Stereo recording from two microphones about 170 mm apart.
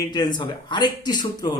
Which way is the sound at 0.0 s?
25° left (ahead or behind).